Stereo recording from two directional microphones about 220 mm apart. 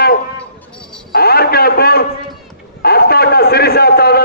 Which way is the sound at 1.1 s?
45° left (ahead or behind).